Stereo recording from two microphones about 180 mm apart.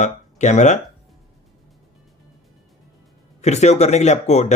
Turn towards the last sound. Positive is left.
turn(degrees=40)  # may be behind; listen again after turning